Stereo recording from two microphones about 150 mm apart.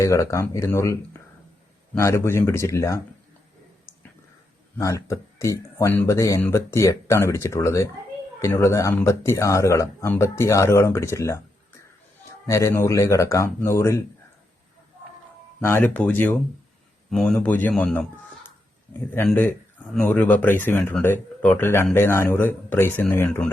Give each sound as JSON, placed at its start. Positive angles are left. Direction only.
{"t": 0.0, "sound": "speech", "side_deg": 20}
{"t": 2.0, "sound": "speech", "side_deg": 20}
{"t": 4.8, "sound": "speech", "side_deg": 20}
{"t": 12.5, "sound": "speech", "side_deg": 20}
{"t": 15.6, "sound": "speech", "side_deg": 15}
{"t": 20.0, "sound": "speech", "side_deg": 10}